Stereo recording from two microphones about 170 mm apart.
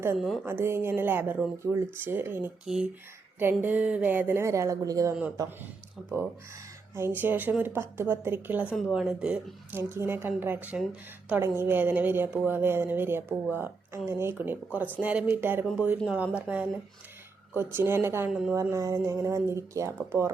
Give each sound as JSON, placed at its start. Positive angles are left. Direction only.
{"t": 0.4, "sound": "a woman's voice", "side_deg": -15}
{"t": 6.9, "sound": "a woman's voice", "side_deg": -15}
{"t": 17.7, "sound": "a woman's voice", "side_deg": -15}
{"t": 18.5, "sound": "a woman's voice", "side_deg": -15}